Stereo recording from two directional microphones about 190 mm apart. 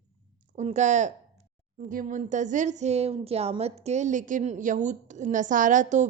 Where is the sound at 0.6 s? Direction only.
35° right (ahead or behind).